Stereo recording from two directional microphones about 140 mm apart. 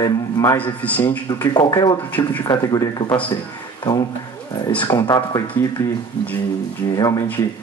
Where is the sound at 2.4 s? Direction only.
30° left (ahead or behind).